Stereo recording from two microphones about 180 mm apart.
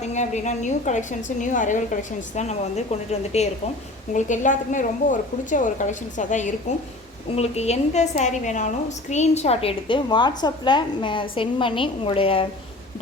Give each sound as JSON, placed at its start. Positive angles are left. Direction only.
{"t": 0.0, "sound": "a woman's voice", "side_deg": 40}